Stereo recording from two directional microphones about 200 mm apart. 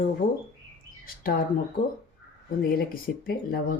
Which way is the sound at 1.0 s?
45° left (ahead or behind).